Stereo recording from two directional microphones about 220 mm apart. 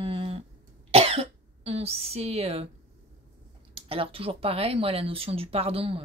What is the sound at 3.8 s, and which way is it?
Speech, 25° right (ahead or behind).